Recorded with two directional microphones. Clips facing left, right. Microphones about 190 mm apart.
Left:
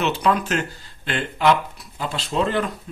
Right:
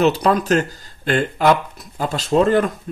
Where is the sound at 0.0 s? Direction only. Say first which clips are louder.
Right 5 dB; 40° right (ahead or behind).